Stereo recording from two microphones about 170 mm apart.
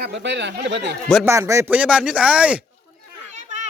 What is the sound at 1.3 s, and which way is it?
Speech, 15° right (ahead or behind).